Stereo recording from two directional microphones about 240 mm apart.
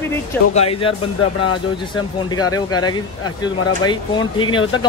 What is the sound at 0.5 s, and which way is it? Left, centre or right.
Speech, left.